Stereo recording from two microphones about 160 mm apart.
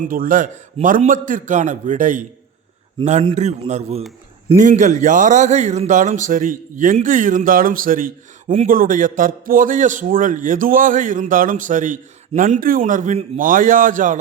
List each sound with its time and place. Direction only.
0.0 s a man's voice: 60° right (ahead or behind)